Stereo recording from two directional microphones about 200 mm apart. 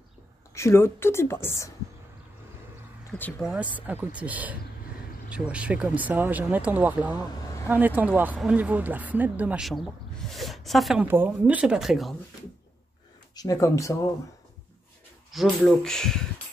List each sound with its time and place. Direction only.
0.6 s speech: 15° left (ahead or behind)
3.1 s speech: 10° left (ahead or behind)
3.7 s speech: 10° right (ahead or behind)
13.3 s speech: 15° left (ahead or behind)
15.3 s speech: centre (ahead or behind)